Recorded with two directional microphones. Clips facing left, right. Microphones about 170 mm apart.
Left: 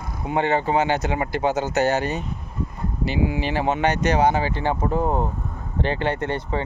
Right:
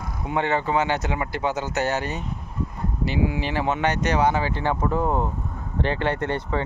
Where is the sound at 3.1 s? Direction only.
30° right (ahead or behind).